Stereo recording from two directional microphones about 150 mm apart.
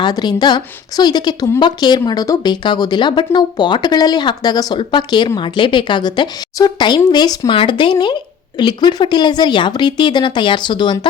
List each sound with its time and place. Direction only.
0.0 s a woman's voice: 30° left (ahead or behind)